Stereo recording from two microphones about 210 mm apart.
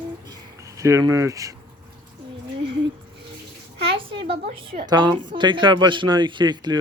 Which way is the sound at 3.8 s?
25° right (ahead or behind).